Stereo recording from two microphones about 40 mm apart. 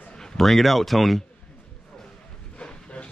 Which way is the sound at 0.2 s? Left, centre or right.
Centre.